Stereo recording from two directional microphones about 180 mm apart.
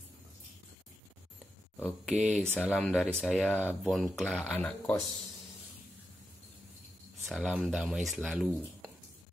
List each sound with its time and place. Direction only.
1.8 s speech: centre (ahead or behind)
3.5 s speech: 10° right (ahead or behind); by 4.9 s 10° left (ahead or behind)
7.2 s speech: 5° right (ahead or behind)